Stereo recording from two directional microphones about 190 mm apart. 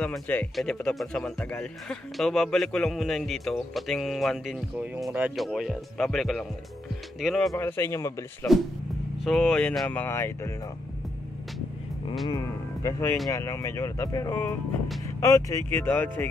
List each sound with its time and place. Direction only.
0.0 s speech: 10° left (ahead or behind)
7.5 s speech: 10° left (ahead or behind)
9.2 s speech: centre (ahead or behind)
12.3 s speech: 20° left (ahead or behind)